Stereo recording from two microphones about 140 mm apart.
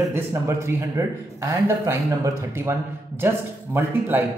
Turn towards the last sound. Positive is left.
turn(degrees=-15)  # may be behind; listen again after turning